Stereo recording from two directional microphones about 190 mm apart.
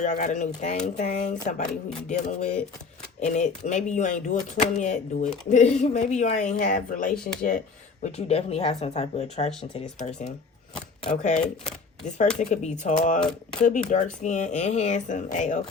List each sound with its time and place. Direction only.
0.0 s speech: 40° left (ahead or behind)
8.0 s speech: 35° left (ahead or behind)
9.5 s speech: 5° left (ahead or behind)
11.0 s speech: 40° left (ahead or behind)